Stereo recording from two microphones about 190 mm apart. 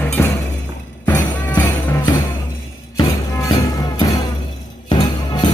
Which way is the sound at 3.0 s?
15° left (ahead or behind).